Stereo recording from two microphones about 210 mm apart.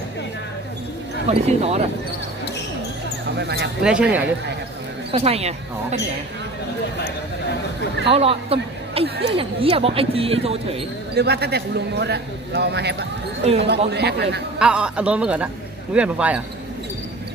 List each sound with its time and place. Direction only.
1.3 s speech: 30° right (ahead or behind)
3.2 s speech: 50° right (ahead or behind)
3.8 s speech: 5° right (ahead or behind)
5.1 s speech: 30° right (ahead or behind)
8.1 s speech: 25° right (ahead or behind)
11.1 s a man's voice: 50° right (ahead or behind)
13.4 s speech: 30° right (ahead or behind)
13.7 s a man's voice: 50° right (ahead or behind)
14.6 s speech: 5° right (ahead or behind)